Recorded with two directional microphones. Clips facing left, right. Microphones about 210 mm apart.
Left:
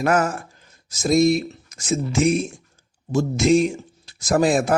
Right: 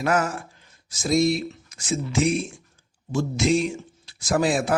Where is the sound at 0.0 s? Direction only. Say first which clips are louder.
Left 3 dB; 45° left (ahead or behind).